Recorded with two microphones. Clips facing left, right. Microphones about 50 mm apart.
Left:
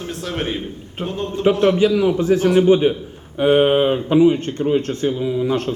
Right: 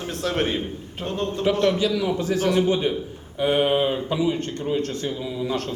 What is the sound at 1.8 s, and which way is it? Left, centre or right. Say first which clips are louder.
Speech: left 7 dB; left.